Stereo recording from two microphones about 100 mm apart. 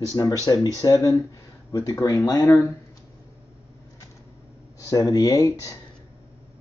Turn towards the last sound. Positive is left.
turn(degrees=35)  # may be behind; listen again after turning